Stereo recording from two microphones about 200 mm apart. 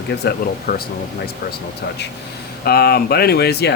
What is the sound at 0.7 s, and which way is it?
Speech, 50° left (ahead or behind).